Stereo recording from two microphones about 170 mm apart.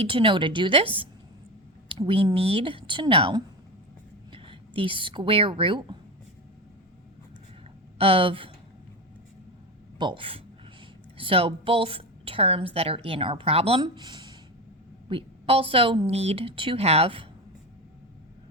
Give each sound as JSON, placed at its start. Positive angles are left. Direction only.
{"t": 0.0, "sound": "a woman's voice", "side_deg": -30}
{"t": 7.9, "sound": "a woman's voice", "side_deg": -35}
{"t": 10.0, "sound": "a woman's voice", "side_deg": -30}